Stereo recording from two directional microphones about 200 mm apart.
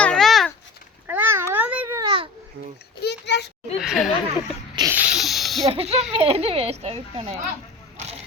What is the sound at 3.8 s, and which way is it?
Speech, centre (ahead or behind).